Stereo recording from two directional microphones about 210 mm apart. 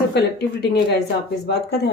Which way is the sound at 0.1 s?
50° left (ahead or behind).